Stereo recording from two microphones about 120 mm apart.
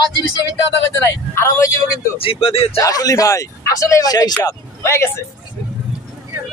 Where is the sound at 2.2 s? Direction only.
55° left (ahead or behind).